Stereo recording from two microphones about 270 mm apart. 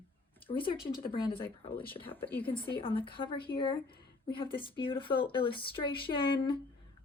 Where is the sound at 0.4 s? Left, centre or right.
Centre.